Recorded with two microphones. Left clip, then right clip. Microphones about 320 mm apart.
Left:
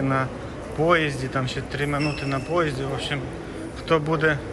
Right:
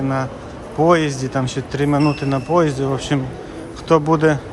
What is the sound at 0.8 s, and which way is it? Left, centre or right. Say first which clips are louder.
Speech: right 5 dB; centre.